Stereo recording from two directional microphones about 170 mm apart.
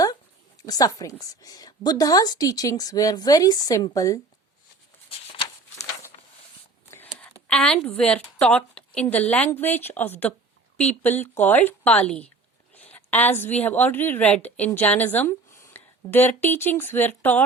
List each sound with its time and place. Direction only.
0.6 s a woman's voice: 20° left (ahead or behind)
7.4 s a woman's voice: 5° left (ahead or behind)